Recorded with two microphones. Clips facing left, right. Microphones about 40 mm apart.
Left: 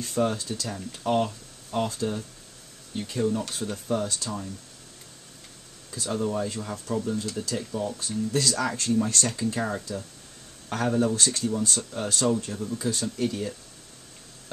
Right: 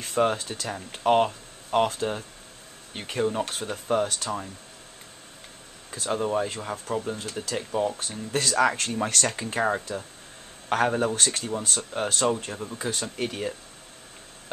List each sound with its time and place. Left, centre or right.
0.0 s speech: right
5.9 s speech: right